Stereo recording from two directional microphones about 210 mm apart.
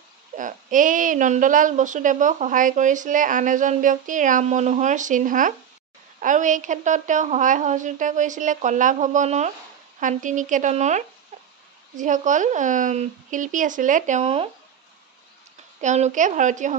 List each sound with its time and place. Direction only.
0.4 s speech: 40° right (ahead or behind)
15.8 s speech: 35° right (ahead or behind)